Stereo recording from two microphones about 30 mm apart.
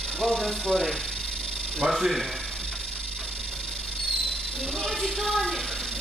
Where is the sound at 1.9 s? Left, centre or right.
Centre.